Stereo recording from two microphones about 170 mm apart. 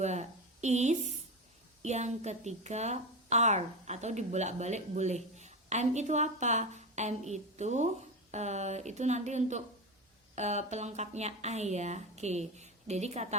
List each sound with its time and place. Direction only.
0.0 s a woman's voice: 45° right (ahead or behind)